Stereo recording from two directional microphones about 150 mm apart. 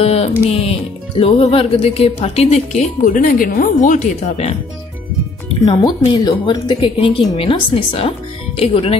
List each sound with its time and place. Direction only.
0.0 s music: 40° left (ahead or behind)
0.5 s speech: 40° left (ahead or behind)
5.7 s speech: 30° left (ahead or behind)